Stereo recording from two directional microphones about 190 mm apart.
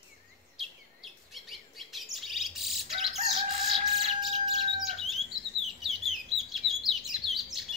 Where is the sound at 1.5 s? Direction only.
Centre (ahead or behind).